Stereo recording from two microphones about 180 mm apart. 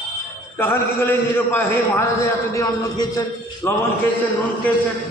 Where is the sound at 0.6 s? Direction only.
15° left (ahead or behind).